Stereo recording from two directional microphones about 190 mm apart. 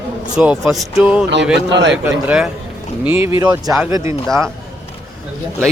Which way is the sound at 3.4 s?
20° right (ahead or behind).